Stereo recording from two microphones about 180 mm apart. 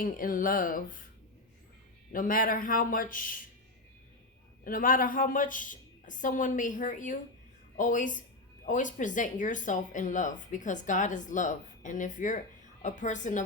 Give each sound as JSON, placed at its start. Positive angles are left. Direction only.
{"t": 0.0, "sound": "speech", "side_deg": 50}
{"t": 2.1, "sound": "speech", "side_deg": 50}
{"t": 4.6, "sound": "speech", "side_deg": 50}